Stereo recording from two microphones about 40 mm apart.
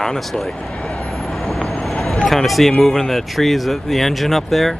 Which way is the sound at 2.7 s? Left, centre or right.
Centre.